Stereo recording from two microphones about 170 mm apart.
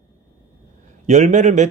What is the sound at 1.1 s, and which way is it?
Speech, 40° right (ahead or behind).